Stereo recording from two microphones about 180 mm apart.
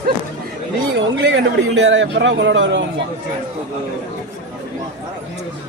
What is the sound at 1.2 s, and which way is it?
A man's voice, 80° right.